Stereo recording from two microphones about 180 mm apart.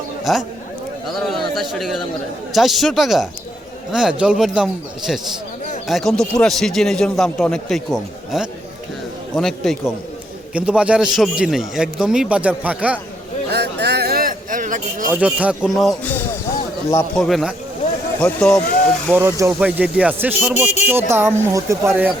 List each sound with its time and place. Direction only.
0.3 s a man's voice: centre (ahead or behind)
13.5 s a sound: 65° right (ahead or behind); by 15.0 s 45° right (ahead or behind)
15.1 s a man's voice: 5° right (ahead or behind)
17.2 s a man's voice: centre (ahead or behind)
19.1 s speech: 15° right (ahead or behind)